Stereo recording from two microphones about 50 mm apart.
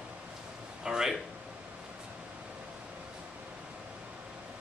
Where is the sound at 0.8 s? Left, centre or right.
Centre.